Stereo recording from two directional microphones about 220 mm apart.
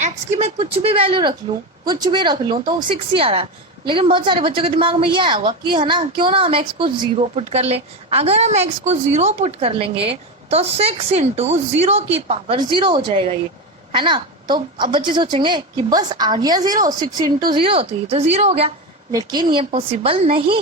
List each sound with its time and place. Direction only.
0.0 s a woman's voice: 30° right (ahead or behind)